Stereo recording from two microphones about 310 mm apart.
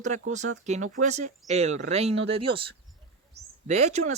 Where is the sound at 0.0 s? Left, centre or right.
Right.